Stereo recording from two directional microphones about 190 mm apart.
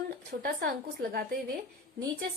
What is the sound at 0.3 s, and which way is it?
Speech, 55° right (ahead or behind).